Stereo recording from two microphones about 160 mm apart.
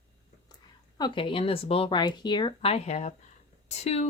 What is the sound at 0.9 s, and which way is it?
Speech, 30° left (ahead or behind).